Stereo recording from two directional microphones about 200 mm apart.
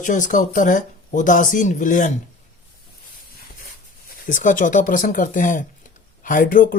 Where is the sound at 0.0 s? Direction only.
40° left (ahead or behind).